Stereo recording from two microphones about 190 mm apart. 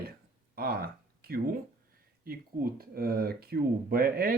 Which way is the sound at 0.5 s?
55° right (ahead or behind).